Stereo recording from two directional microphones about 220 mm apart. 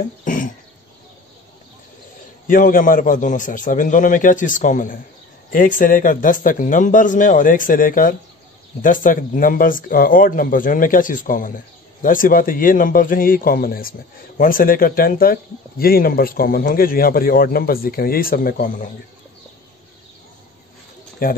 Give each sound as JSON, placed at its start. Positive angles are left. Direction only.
{"t": 0.2, "sound": "a sound", "side_deg": 35}
{"t": 2.4, "sound": "speech", "side_deg": 40}
{"t": 21.2, "sound": "speech", "side_deg": 40}